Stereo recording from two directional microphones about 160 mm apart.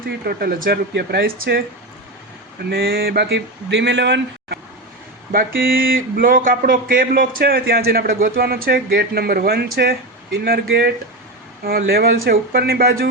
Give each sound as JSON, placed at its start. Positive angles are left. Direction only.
{"t": 0.3, "sound": "speech", "side_deg": -70}
{"t": 2.6, "sound": "speech", "side_deg": -70}
{"t": 5.3, "sound": "speech", "side_deg": -65}
{"t": 11.6, "sound": "speech", "side_deg": -70}